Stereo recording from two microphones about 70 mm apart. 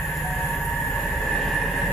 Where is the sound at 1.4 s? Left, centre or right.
Centre.